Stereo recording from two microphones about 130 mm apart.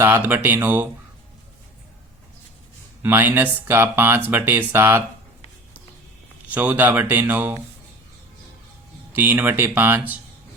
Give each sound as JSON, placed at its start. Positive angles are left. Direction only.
{"t": 0.0, "sound": "speech", "side_deg": -15}
{"t": 3.0, "sound": "speech", "side_deg": -15}
{"t": 6.5, "sound": "speech", "side_deg": -10}
{"t": 9.1, "sound": "speech", "side_deg": -15}